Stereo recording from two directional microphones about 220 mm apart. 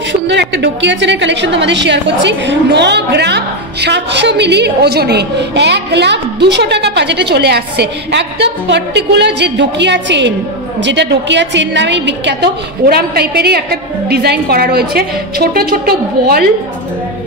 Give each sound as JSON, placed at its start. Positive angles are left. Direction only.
{"t": 0.3, "sound": "a woman's voice", "side_deg": -50}